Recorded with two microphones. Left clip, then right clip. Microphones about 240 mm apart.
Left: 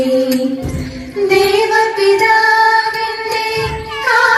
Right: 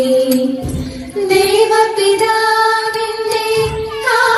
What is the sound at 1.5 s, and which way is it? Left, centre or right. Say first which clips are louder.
Child singing: right 1 dB; right.